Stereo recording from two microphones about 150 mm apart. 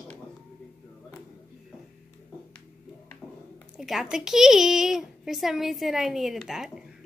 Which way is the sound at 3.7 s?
Centre (ahead or behind).